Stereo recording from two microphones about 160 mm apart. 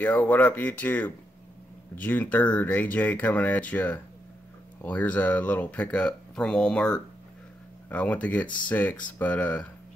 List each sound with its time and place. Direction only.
0.0 s speech: 10° left (ahead or behind)